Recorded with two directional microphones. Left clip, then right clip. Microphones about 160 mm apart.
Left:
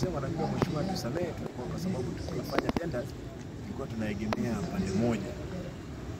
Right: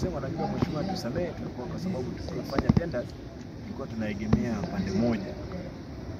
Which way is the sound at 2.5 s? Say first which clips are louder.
Right 2 dB; 20° left (ahead or behind).